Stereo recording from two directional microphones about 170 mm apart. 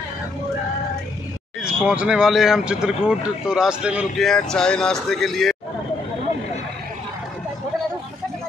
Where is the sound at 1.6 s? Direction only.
5° right (ahead or behind).